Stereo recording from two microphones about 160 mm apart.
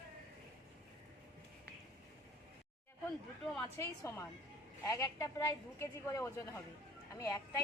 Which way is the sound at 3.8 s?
15° left (ahead or behind).